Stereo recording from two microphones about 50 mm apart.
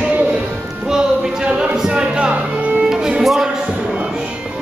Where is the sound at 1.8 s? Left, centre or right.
Centre.